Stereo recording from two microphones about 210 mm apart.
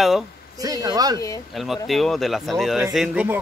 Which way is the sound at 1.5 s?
Centre (ahead or behind).